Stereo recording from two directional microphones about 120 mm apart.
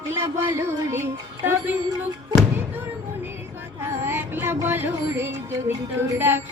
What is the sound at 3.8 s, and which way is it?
Music, 20° right (ahead or behind).